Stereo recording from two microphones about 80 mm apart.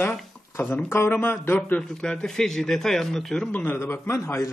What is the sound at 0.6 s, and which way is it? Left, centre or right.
Speech, left.